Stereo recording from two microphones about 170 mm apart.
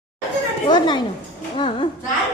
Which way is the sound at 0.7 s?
25° left (ahead or behind).